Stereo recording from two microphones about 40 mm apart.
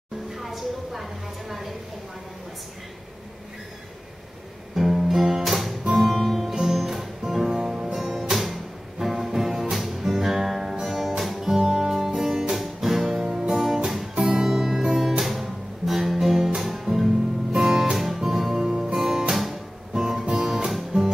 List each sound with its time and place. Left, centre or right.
0.3 s a sound: centre
4.7 s guitar: centre
5.1 s music: centre
6.5 s music: centre
17.9 s music: centre; by 21.1 s right